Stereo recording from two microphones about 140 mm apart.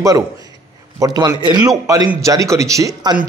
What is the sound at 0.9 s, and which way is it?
Speech, 25° right (ahead or behind).